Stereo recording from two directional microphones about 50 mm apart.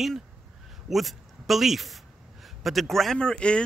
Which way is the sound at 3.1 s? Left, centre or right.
Centre.